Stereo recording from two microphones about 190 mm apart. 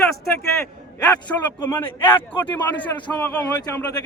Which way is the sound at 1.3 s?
10° left (ahead or behind).